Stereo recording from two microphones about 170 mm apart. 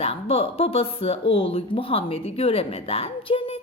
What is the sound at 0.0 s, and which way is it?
A woman's voice, 35° left (ahead or behind).